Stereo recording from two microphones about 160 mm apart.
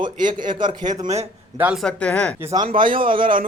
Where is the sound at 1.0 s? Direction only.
40° right (ahead or behind).